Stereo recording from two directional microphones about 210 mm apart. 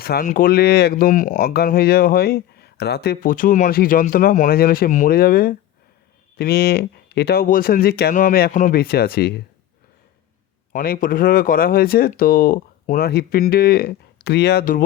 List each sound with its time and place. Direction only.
0.0 s speech: 45° left (ahead or behind)
10.7 s speech: 40° left (ahead or behind)